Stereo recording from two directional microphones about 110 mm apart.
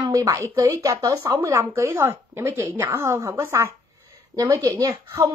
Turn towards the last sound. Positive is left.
turn(degrees=-30)  # may be behind; listen again after turning